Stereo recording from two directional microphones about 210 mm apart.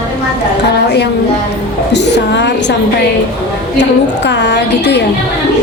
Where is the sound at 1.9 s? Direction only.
55° left (ahead or behind).